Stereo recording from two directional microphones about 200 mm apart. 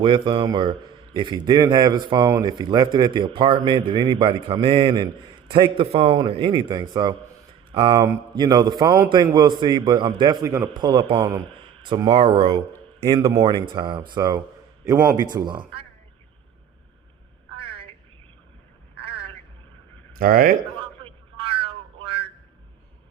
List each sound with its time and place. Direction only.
0.0 s speech: 25° right (ahead or behind)
14.8 s a man's voice: 10° right (ahead or behind)
15.1 s speech: 20° right (ahead or behind)
17.6 s a sound: 25° right (ahead or behind)
19.0 s telephone: 25° right (ahead or behind)
20.1 s speech: 45° right (ahead or behind)
20.8 s cat: 25° right (ahead or behind)